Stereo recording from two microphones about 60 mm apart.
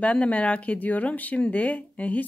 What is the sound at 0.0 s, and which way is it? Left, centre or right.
Speech, left.